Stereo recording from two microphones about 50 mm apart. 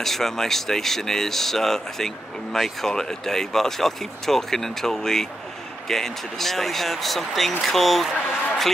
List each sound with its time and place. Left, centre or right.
0.0 s speech: centre